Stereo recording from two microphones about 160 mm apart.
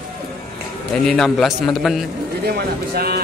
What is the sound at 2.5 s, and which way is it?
Speech, 75° right (ahead or behind).